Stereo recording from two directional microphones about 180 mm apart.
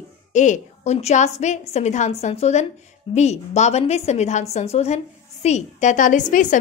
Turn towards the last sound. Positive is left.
turn(degrees=45)  # may be behind; listen again after turning